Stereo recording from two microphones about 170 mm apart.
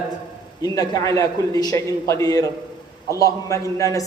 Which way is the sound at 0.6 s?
20° left (ahead or behind).